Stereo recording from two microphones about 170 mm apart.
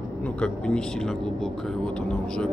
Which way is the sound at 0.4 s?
5° left (ahead or behind).